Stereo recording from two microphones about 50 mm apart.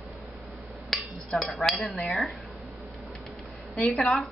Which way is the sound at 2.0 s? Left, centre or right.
Centre.